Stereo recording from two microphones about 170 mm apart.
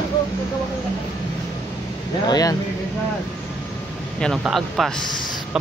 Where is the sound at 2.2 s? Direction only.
25° left (ahead or behind).